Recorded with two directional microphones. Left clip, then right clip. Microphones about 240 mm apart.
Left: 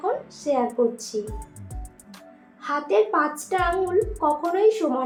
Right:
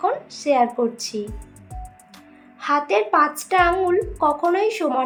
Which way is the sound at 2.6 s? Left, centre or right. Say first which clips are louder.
Right 2 dB; right.